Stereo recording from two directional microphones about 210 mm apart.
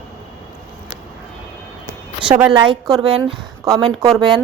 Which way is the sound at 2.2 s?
5° right (ahead or behind).